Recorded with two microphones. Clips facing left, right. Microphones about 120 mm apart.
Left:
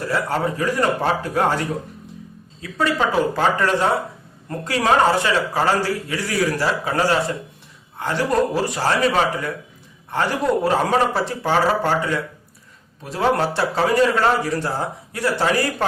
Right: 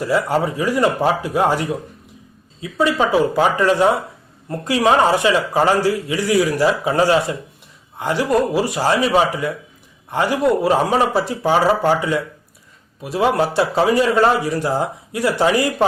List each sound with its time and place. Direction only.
0.1 s a man's voice: 10° right (ahead or behind)
2.6 s a man's voice: 10° right (ahead or behind)